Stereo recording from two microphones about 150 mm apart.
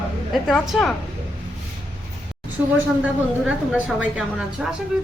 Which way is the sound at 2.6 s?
15° right (ahead or behind).